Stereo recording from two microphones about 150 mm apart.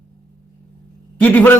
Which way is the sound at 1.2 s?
10° left (ahead or behind).